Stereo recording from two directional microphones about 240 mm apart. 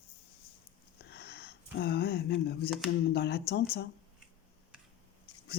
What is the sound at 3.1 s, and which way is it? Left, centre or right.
Speech, left.